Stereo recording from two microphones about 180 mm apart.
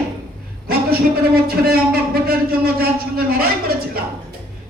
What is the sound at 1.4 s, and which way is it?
A woman's voice, 55° right (ahead or behind).